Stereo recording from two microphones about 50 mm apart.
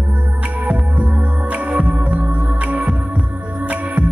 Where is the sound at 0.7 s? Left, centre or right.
Right.